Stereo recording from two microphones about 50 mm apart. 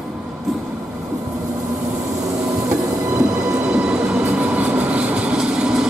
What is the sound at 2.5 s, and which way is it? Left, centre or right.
Train, right.